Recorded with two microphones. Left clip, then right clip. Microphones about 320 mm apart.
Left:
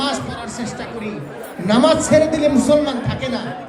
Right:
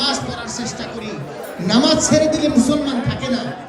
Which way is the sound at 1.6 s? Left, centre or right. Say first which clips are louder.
Left 1 dB; left.